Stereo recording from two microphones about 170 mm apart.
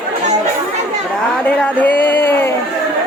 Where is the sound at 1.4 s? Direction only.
10° left (ahead or behind).